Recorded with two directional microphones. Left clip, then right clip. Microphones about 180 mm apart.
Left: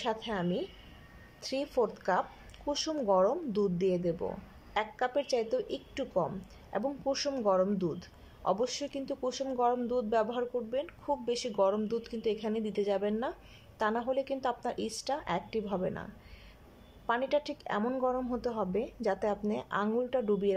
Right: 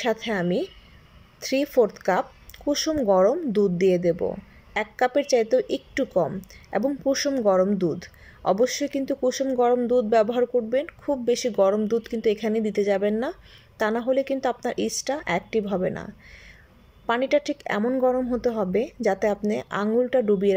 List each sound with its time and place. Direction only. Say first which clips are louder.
0.0 s a man's voice: right 9 dB; 20° right (ahead or behind)